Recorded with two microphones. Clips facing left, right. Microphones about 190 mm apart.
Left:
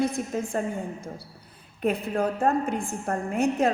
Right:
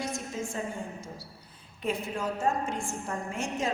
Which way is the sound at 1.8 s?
60° left (ahead or behind).